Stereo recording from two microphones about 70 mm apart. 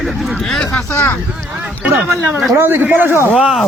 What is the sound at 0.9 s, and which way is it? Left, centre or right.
Speech, left.